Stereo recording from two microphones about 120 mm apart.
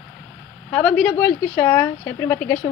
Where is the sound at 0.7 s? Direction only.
10° left (ahead or behind).